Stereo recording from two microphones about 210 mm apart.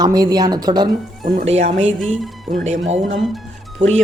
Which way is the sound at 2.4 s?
40° right (ahead or behind).